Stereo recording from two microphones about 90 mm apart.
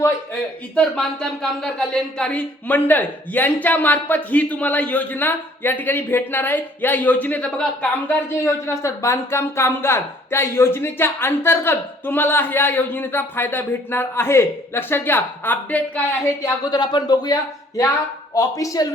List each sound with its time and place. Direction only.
0.8 s speech: 5° left (ahead or behind)
8.6 s speech: 35° left (ahead or behind)
16.7 s speech: 55° left (ahead or behind)